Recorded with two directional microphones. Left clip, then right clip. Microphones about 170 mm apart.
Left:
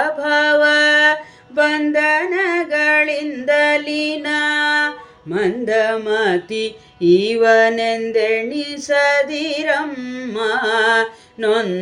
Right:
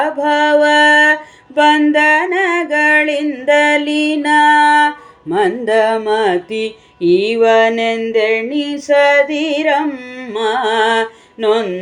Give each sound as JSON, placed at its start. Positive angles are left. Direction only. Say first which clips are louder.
{"t": 0.0, "sound": "music", "louder": "right 3 dB", "side_deg": -5}
{"t": 1.7, "sound": "a sound", "louder": "right 5 dB", "side_deg": -15}
{"t": 5.3, "sound": "music", "louder": "right 4 dB", "side_deg": -25}
{"t": 7.1, "sound": "mantra", "louder": "right 2 dB", "side_deg": 0}
{"t": 9.3, "sound": "music", "louder": "right 4 dB", "side_deg": -5}
{"t": 11.4, "sound": "mantra", "louder": "right 3 dB", "side_deg": 0}